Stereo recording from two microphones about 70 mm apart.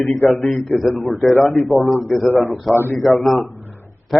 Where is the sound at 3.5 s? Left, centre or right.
Left.